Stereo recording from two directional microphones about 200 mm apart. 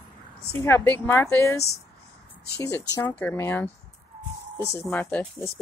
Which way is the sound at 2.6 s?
15° left (ahead or behind).